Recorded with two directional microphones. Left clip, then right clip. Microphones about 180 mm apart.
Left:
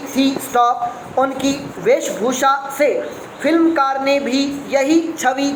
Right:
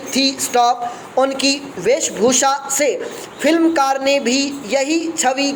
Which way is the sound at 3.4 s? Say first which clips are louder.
Even; 55° right (ahead or behind).